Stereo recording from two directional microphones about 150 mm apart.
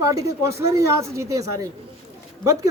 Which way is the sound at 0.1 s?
20° right (ahead or behind).